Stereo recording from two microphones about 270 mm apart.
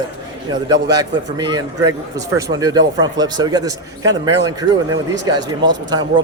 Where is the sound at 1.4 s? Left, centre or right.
Centre.